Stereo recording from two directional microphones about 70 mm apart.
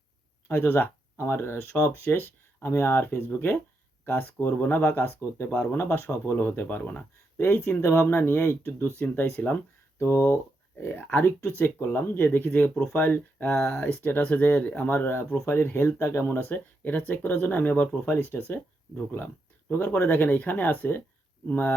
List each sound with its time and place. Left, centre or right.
0.4 s speech: left